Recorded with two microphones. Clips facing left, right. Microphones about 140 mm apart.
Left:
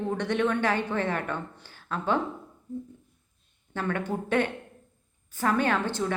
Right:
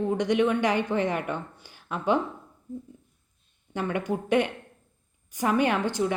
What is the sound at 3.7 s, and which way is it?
A woman's voice, 15° right (ahead or behind).